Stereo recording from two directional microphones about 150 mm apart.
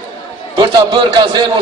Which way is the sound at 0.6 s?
30° right (ahead or behind).